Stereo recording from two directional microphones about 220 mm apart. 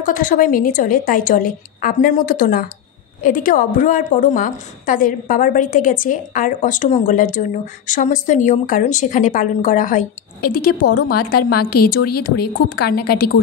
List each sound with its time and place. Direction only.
0.0 s a woman's voice: 40° left (ahead or behind)